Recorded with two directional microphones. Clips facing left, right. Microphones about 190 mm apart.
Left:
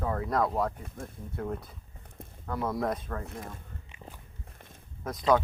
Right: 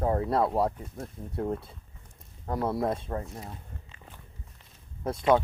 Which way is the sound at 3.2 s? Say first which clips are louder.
Left 1 dB; 55° left (ahead or behind).